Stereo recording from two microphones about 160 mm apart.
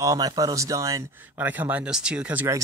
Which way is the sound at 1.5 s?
10° right (ahead or behind).